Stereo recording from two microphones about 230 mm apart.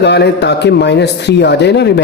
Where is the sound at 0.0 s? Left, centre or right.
Left.